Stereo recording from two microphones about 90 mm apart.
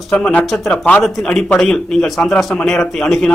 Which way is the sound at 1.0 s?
Centre (ahead or behind).